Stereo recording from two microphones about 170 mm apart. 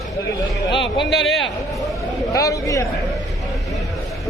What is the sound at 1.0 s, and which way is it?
Speech, centre (ahead or behind).